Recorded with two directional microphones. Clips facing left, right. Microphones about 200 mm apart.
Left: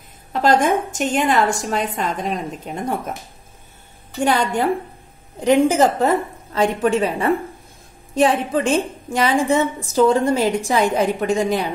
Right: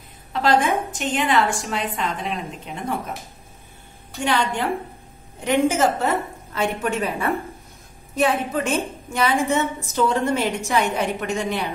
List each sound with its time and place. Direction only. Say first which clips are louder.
0.3 s a woman's voice: left 3 dB; 45° left (ahead or behind)
4.2 s a woman's voice: left 4 dB; 40° left (ahead or behind)